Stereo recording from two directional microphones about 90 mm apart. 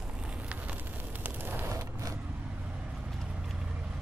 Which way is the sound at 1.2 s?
20° right (ahead or behind).